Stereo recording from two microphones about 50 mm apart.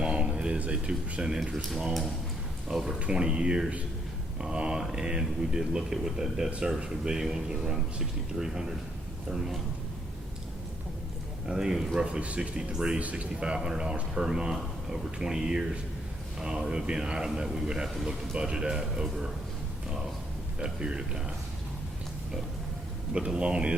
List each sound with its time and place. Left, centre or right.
0.0 s a sound: centre
0.6 s speech: right
3.0 s speech: centre
11.4 s a man's voice: centre; by 13.2 s right
13.6 s speech: centre
20.6 s speech: centre
23.1 s speech: right